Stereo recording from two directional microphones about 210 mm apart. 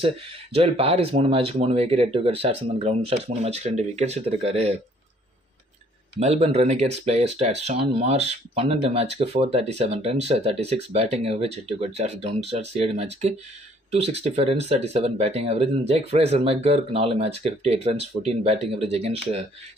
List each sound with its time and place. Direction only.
0.0 s speech: 25° right (ahead or behind)
6.1 s speech: 30° right (ahead or behind)